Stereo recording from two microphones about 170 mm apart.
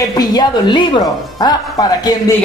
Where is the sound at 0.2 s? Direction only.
25° left (ahead or behind).